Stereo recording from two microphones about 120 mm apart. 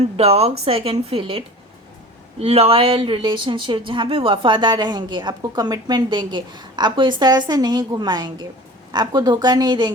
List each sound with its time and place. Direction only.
0.2 s speech: 60° right (ahead or behind); by 9.9 s 35° right (ahead or behind)